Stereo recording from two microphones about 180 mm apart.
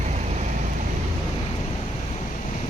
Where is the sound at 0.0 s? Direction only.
40° right (ahead or behind).